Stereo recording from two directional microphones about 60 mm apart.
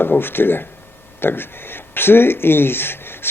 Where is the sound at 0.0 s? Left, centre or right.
Left.